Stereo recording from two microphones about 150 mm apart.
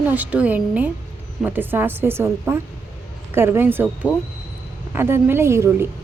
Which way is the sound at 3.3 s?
15° right (ahead or behind).